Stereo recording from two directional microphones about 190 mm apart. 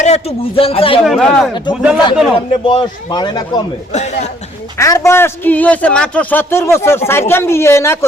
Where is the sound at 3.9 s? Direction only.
35° left (ahead or behind).